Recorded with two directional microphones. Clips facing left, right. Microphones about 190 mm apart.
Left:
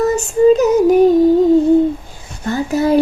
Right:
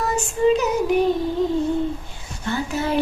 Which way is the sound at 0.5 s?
45° left (ahead or behind).